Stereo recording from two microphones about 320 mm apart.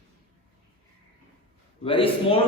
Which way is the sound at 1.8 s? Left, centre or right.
Centre.